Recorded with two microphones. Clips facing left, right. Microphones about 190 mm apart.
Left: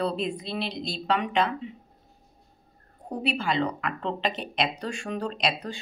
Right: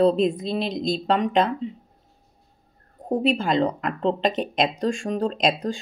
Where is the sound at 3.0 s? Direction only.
45° right (ahead or behind).